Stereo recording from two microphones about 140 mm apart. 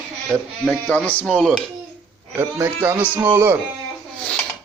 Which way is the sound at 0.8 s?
10° left (ahead or behind).